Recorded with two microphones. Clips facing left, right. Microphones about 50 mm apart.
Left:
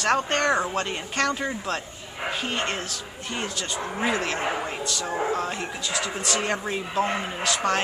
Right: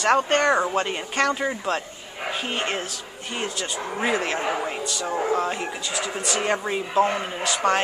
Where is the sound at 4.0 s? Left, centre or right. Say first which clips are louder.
Right 2 dB; centre.